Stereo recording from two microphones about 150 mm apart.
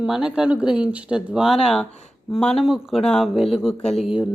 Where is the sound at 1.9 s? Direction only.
50° left (ahead or behind).